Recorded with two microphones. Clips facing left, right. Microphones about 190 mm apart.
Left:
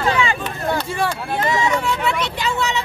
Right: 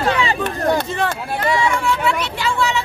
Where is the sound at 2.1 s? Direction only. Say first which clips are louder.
Right 1 dB; 20° left (ahead or behind).